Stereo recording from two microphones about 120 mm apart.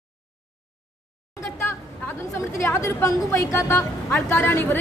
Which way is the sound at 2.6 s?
25° left (ahead or behind).